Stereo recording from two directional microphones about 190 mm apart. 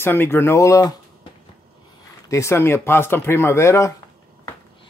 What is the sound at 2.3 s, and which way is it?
Speech, 15° left (ahead or behind).